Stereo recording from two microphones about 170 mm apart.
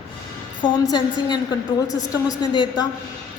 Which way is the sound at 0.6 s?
25° left (ahead or behind).